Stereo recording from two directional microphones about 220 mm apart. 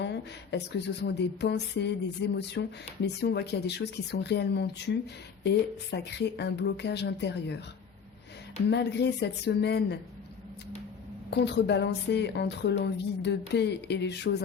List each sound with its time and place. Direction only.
0.0 s speech: 50° left (ahead or behind)
8.7 s speech: 50° left (ahead or behind)
11.3 s speech: 50° left (ahead or behind)